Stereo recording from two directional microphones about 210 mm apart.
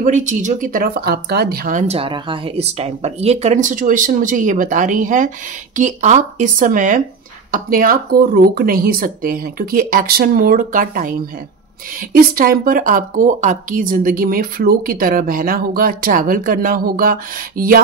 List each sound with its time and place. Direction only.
0.0 s a woman's voice: 35° right (ahead or behind)